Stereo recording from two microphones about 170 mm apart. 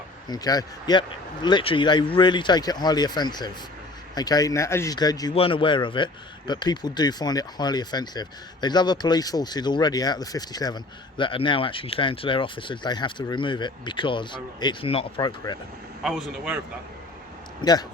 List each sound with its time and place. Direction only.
0.3 s speech: 20° left (ahead or behind)
16.0 s speech: centre (ahead or behind)
17.6 s speech: 25° left (ahead or behind)